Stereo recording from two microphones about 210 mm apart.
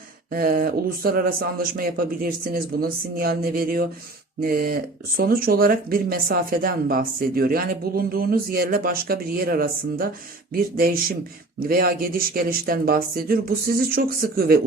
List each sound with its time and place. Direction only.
0.3 s speech: 45° right (ahead or behind)